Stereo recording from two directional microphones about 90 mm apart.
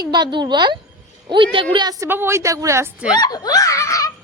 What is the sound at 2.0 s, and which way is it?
Speech, 25° right (ahead or behind).